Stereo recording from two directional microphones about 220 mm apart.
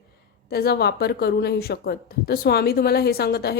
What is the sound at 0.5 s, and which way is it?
Speech, 45° left (ahead or behind).